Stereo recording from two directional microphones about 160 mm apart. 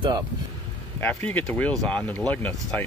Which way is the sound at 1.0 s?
10° left (ahead or behind).